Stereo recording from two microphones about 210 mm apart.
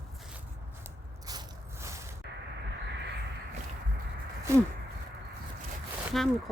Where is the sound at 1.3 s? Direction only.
15° right (ahead or behind).